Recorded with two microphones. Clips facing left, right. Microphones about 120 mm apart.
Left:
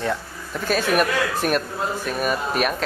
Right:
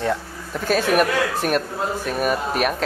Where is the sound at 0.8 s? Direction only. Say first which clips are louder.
Right 2 dB; 45° right (ahead or behind).